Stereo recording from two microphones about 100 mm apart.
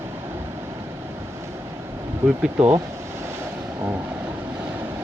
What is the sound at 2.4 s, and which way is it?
Speech, 10° right (ahead or behind).